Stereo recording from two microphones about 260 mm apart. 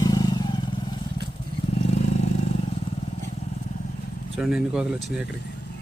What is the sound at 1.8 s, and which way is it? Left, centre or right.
Vehicle, left.